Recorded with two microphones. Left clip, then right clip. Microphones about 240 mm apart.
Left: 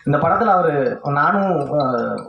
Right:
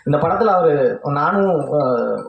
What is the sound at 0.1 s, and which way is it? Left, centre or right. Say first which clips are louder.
Speech: even; right.